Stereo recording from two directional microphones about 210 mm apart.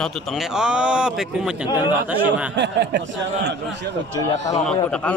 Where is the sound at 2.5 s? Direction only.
55° right (ahead or behind).